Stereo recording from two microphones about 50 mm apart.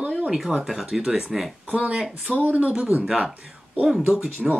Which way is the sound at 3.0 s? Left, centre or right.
Centre.